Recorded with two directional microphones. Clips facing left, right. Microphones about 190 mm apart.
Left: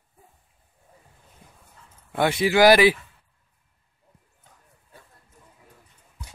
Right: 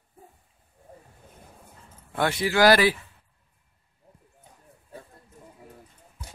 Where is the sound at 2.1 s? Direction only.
20° left (ahead or behind).